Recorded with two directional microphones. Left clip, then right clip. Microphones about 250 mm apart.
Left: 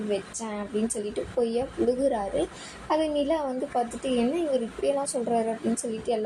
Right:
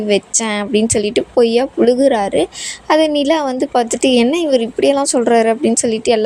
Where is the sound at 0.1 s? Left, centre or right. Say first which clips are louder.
Right 16 dB; right.